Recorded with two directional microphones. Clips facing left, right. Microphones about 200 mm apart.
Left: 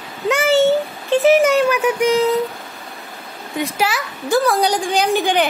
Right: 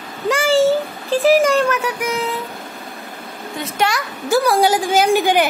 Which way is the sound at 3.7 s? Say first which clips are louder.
Right 3 dB; 5° left (ahead or behind).